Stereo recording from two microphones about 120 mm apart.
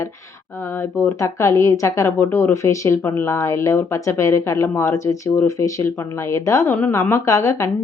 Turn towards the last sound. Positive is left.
turn(degrees=25)  # may be behind; listen again after turning